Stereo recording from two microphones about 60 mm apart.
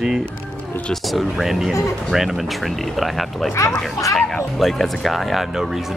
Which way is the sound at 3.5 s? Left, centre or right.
Left.